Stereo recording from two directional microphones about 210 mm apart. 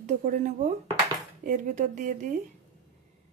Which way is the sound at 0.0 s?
35° right (ahead or behind).